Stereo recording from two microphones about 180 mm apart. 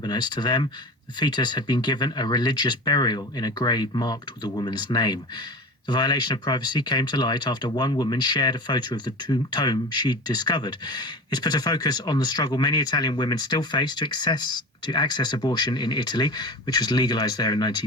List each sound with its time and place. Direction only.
0.0 s speech: 25° left (ahead or behind)